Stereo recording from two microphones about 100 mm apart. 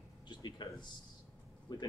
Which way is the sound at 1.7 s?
45° left (ahead or behind).